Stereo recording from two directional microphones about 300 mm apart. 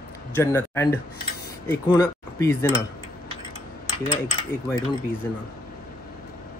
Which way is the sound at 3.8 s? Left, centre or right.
Centre.